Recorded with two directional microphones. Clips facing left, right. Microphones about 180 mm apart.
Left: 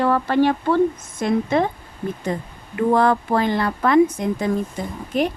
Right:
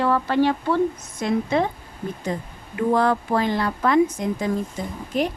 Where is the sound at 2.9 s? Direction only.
60° left (ahead or behind).